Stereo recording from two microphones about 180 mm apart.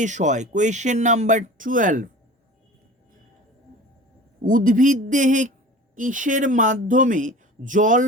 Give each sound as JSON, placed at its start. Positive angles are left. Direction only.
{"t": 0.0, "sound": "speech", "side_deg": -40}
{"t": 4.4, "sound": "speech", "side_deg": -50}